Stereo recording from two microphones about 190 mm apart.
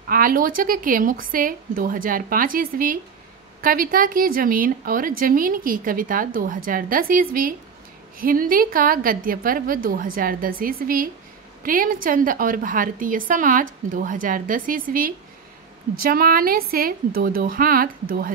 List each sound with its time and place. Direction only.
0.1 s a woman's voice: 50° right (ahead or behind)